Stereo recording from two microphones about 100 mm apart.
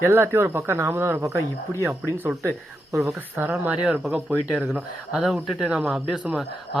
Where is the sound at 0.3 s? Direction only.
25° right (ahead or behind).